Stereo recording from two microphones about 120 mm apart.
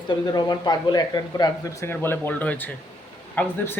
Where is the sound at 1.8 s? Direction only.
20° left (ahead or behind).